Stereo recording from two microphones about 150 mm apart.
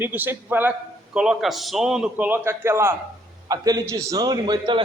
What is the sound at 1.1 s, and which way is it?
A man's voice, centre (ahead or behind).